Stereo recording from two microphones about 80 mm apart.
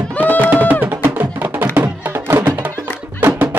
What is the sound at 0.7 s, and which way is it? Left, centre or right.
Music, right.